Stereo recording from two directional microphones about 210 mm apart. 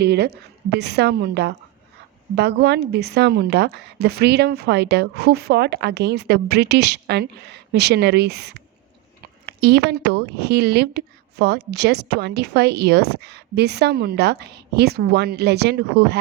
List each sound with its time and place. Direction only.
0.0 s speech: 50° right (ahead or behind)